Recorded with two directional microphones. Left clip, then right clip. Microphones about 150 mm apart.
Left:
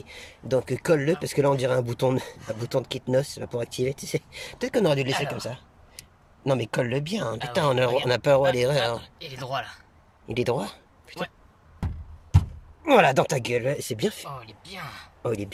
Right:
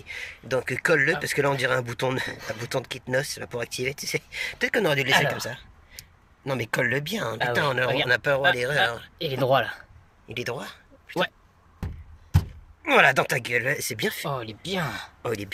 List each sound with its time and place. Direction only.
0.0 s speech: 15° left (ahead or behind)
9.1 s speech: 50° right (ahead or behind)
10.2 s speech: 20° left (ahead or behind)
12.8 s speech: 15° left (ahead or behind)
14.3 s speech: 45° right (ahead or behind)
15.2 s speech: 10° left (ahead or behind)